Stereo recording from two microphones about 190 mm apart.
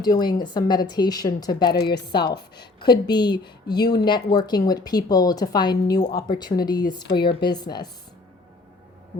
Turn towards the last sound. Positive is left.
turn(degrees=20)  # may be behind; listen again after turning